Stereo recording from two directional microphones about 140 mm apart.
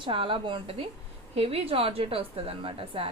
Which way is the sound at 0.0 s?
40° right (ahead or behind).